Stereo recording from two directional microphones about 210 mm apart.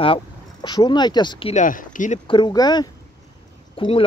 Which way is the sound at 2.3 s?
20° left (ahead or behind).